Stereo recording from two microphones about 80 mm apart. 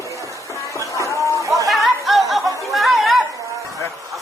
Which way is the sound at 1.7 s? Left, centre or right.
Centre.